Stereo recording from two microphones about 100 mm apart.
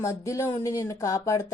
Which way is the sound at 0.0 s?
30° left (ahead or behind).